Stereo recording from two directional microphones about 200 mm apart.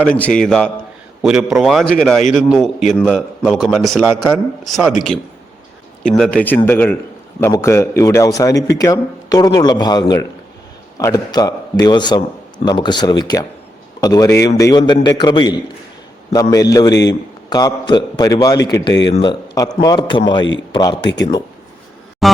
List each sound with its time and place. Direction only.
0.0 s a man's voice: 5° left (ahead or behind)
6.0 s a man's voice: 5° left (ahead or behind); by 21.0 s 20° left (ahead or behind)
21.1 s a man's voice: 60° left (ahead or behind)
22.2 s music: centre (ahead or behind)